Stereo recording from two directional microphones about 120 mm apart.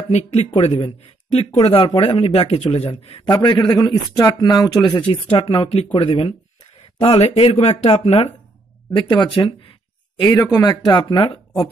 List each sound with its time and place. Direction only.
0.1 s speech: 65° left (ahead or behind)
0.6 s speech: 50° left (ahead or behind)
3.3 s speech: 35° left (ahead or behind)
5.3 s speech: 45° left (ahead or behind)
7.0 s speech: 55° left (ahead or behind)
8.9 s speech: 40° left (ahead or behind)
10.3 s speech: 25° left (ahead or behind); by 11.3 s 40° left (ahead or behind)